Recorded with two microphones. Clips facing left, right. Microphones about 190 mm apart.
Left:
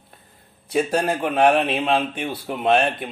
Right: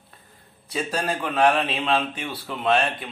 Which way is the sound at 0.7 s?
55° left (ahead or behind).